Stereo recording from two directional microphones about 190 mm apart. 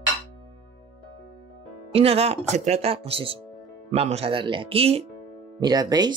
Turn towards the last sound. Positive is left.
turn(degrees=-20)  # may be behind; listen again after turning